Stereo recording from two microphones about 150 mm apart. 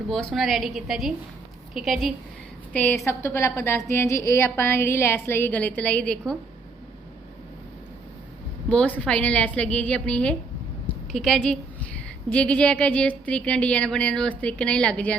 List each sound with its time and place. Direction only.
0.1 s a woman's voice: 5° left (ahead or behind)
2.7 s a woman's voice: 15° left (ahead or behind)
8.7 s a woman's voice: 10° left (ahead or behind)